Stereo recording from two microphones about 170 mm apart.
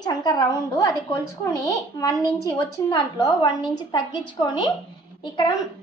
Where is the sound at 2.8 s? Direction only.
20° left (ahead or behind).